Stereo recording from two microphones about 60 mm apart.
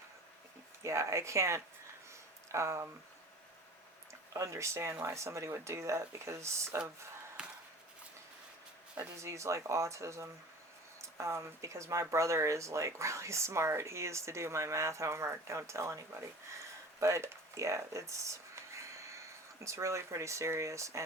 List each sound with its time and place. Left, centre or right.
0.8 s speech: right
4.1 s speech: right
7.4 s a sound: centre
9.1 s speech: right
17.0 s writing: right
19.6 s speech: right